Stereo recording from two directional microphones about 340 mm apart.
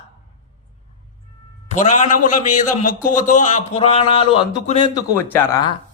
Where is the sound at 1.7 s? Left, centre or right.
Left.